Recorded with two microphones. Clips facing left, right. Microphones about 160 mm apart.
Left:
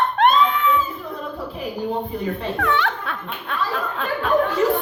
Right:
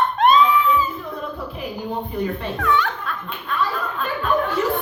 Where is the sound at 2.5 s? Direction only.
65° left (ahead or behind).